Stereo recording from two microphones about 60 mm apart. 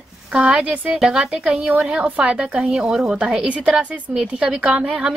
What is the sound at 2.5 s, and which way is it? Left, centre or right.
A woman's voice, centre.